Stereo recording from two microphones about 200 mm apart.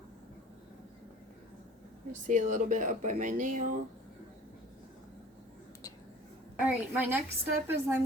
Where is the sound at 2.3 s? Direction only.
40° right (ahead or behind).